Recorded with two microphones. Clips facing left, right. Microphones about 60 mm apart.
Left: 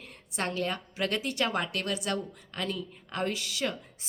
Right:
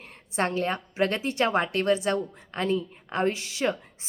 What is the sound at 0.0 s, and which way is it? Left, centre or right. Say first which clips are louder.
A woman's voice: right 6 dB; right.